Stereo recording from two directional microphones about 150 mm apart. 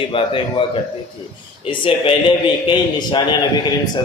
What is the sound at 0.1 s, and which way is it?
Speech, 35° left (ahead or behind).